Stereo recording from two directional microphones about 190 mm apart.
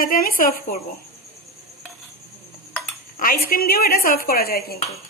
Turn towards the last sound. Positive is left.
turn(degrees=55)  # may be behind; listen again after turning